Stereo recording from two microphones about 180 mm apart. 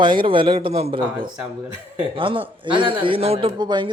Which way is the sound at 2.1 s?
30° right (ahead or behind).